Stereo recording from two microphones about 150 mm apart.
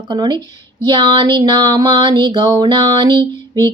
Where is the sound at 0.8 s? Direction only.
30° right (ahead or behind).